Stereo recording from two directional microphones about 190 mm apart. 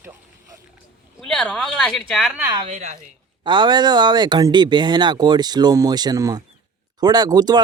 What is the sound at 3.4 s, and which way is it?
Speech, 25° right (ahead or behind).